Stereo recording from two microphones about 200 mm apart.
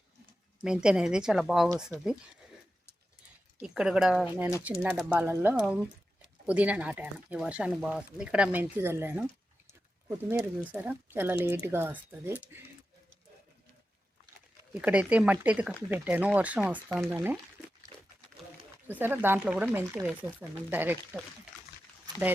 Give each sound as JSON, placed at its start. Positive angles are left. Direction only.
{"t": 0.6, "sound": "a woman's voice", "side_deg": -5}
{"t": 3.6, "sound": "a woman's voice", "side_deg": -5}
{"t": 14.7, "sound": "speech", "side_deg": -5}
{"t": 17.9, "sound": "pig", "side_deg": -20}
{"t": 18.9, "sound": "speech", "side_deg": -10}